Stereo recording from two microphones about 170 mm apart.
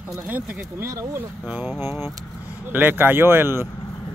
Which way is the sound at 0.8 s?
15° right (ahead or behind).